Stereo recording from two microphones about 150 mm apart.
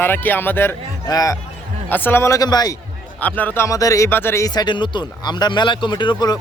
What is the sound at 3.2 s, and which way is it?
Speech, 10° left (ahead or behind).